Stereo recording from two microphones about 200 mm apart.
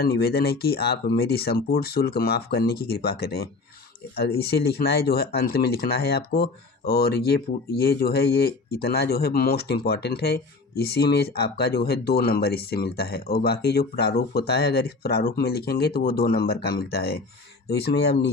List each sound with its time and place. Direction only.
0.0 s speech: 50° left (ahead or behind)